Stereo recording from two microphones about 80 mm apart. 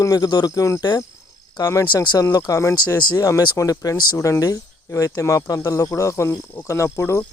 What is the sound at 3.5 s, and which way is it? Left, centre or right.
Speech, left.